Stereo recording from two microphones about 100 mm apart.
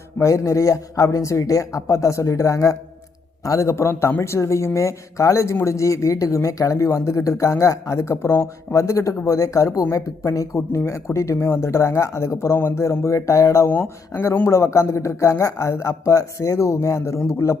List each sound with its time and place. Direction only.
0.2 s speech: 30° left (ahead or behind)